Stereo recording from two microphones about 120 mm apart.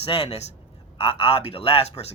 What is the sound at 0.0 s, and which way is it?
Speech, 55° left (ahead or behind).